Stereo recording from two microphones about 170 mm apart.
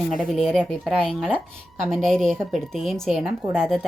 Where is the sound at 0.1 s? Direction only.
Centre (ahead or behind).